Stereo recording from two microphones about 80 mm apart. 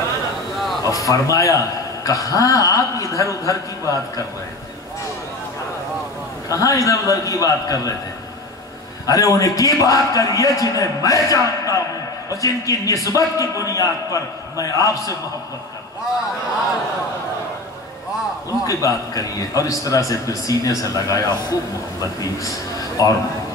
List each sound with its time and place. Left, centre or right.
0.8 s a man's voice: left
6.5 s a man's voice: left
9.0 s a man's voice: left
18.7 s a man's voice: left